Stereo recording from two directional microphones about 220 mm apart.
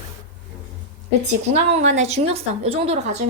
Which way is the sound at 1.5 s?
30° right (ahead or behind).